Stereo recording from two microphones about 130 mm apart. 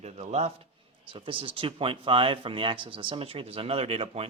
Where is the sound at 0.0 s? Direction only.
55° right (ahead or behind).